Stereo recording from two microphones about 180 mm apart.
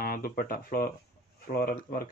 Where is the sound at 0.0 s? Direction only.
55° left (ahead or behind).